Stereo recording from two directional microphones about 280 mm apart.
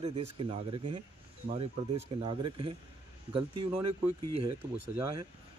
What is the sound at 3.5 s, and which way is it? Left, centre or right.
Speech, right.